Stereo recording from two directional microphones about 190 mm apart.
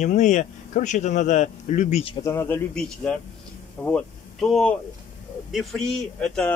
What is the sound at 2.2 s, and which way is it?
Speech, 15° left (ahead or behind).